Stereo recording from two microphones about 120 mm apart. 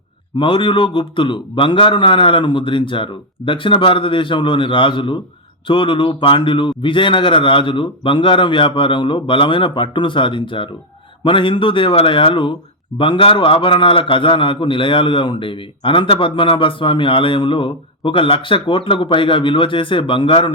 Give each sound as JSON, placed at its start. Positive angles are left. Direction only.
{"t": 0.3, "sound": "a man's voice", "side_deg": 45}